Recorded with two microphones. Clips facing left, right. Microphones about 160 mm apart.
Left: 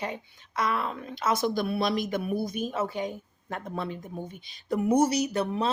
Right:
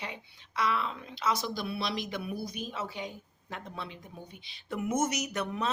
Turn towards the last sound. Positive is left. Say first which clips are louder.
# left 6 dB
turn(degrees=30)  # may be behind; listen again after turning